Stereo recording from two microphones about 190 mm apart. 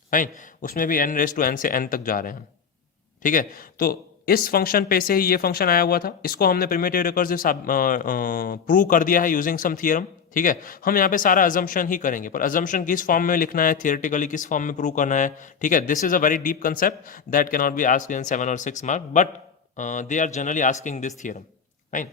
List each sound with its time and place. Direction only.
0.1 s speech: 45° left (ahead or behind)